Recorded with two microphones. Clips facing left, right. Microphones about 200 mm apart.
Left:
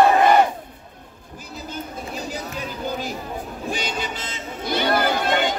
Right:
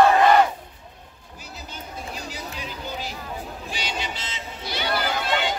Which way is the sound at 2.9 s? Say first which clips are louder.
Left 5 dB; 50° left (ahead or behind).